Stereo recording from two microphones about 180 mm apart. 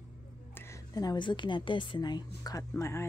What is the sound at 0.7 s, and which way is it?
A woman's voice, 20° left (ahead or behind).